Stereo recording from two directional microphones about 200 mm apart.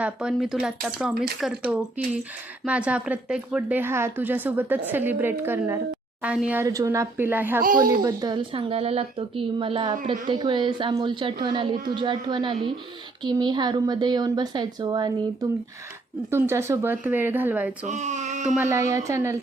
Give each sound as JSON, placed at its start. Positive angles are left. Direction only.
{"t": 0.0, "sound": "a woman's voice", "side_deg": -5}
{"t": 17.8, "sound": "a sound", "side_deg": -35}
{"t": 18.5, "sound": "speech", "side_deg": -10}